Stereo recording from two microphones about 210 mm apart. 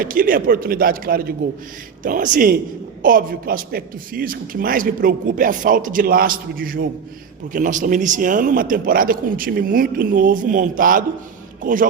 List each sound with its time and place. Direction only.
0.0 s a man's voice: 40° right (ahead or behind)